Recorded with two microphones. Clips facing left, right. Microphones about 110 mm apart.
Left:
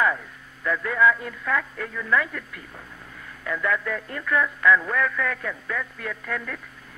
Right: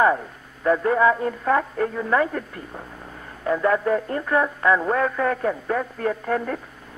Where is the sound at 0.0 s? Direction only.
35° right (ahead or behind).